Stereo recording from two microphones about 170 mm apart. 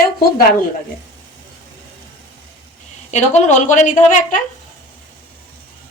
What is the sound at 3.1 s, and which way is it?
A woman's voice, 45° left (ahead or behind).